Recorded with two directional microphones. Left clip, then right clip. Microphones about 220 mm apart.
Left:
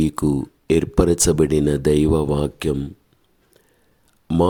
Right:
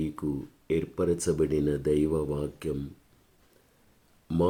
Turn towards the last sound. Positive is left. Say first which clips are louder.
# left 9 dB
turn(degrees=35)  # may be behind; listen again after turning